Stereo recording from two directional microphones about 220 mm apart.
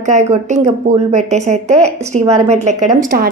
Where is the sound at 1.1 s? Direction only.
30° right (ahead or behind).